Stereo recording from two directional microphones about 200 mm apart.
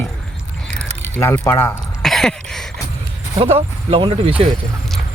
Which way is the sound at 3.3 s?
30° right (ahead or behind).